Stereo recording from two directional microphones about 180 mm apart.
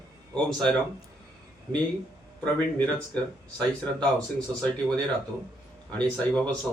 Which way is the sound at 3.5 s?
5° left (ahead or behind).